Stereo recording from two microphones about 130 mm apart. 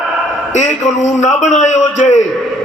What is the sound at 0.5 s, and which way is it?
A man's voice, 65° left (ahead or behind).